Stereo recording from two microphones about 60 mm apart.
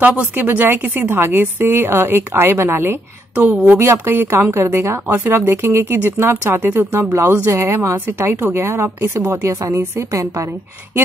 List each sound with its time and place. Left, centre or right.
0.0 s a woman's voice: right
3.3 s a woman's voice: right
3.8 s a woman's voice: right
5.1 s a woman's voice: right
5.4 s a woman's voice: right